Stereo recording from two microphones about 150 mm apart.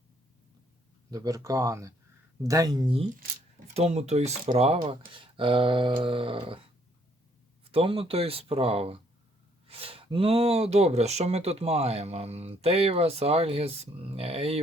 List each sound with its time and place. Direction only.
1.1 s speech: 25° right (ahead or behind)
3.8 s speech: 45° right (ahead or behind)
7.6 s speech: 40° right (ahead or behind)